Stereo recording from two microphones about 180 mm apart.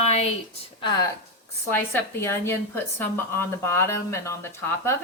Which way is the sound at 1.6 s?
15° left (ahead or behind).